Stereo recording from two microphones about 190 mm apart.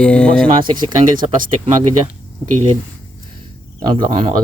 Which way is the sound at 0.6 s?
25° right (ahead or behind).